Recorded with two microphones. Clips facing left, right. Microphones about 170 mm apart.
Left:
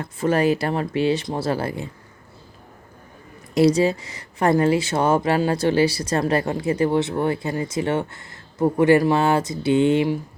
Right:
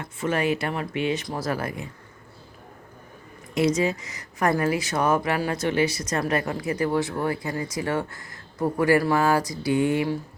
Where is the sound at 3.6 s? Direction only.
35° left (ahead or behind).